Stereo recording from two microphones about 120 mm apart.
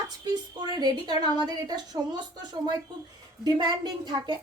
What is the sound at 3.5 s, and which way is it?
Speech, 40° right (ahead or behind).